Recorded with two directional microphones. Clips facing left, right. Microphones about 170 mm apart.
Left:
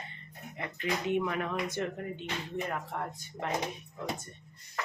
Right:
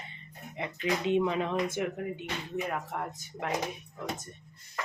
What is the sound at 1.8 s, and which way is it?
Speech, 10° right (ahead or behind).